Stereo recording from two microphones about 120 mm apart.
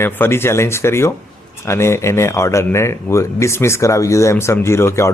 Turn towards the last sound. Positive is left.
turn(degrees=20)  # may be behind; listen again after turning